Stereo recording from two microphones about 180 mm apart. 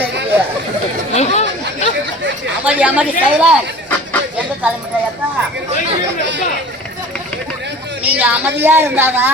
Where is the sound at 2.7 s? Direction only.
10° right (ahead or behind).